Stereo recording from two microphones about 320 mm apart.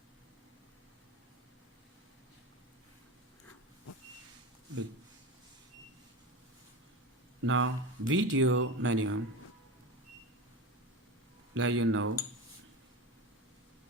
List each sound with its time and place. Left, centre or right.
7.4 s speech: right
11.5 s speech: right